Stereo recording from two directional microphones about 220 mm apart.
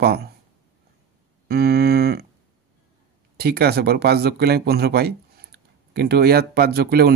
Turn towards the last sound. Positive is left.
turn(degrees=-45)  # may be behind; listen again after turning